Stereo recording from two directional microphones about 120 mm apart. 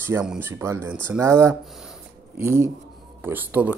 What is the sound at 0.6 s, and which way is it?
Speech, 25° right (ahead or behind).